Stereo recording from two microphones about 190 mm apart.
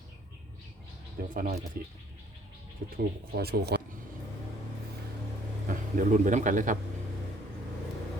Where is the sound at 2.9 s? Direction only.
55° right (ahead or behind).